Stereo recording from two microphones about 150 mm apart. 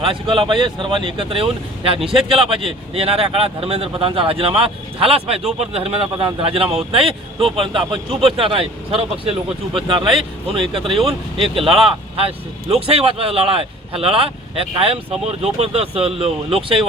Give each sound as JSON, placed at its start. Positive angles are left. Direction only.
{"t": 0.0, "sound": "speech", "side_deg": -35}